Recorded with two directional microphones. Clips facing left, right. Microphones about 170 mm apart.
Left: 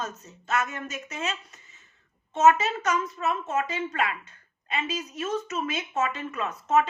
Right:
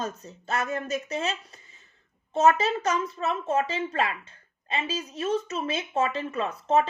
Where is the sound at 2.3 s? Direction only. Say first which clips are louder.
Left 1 dB; 35° right (ahead or behind).